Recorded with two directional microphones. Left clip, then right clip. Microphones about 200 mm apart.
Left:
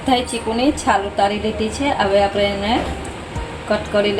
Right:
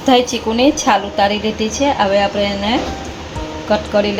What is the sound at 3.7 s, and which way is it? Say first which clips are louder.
Speech: right 2 dB; 20° right (ahead or behind).